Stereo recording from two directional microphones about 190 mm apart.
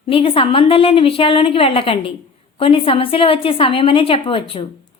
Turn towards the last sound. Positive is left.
turn(degrees=25)  # may be behind; listen again after turning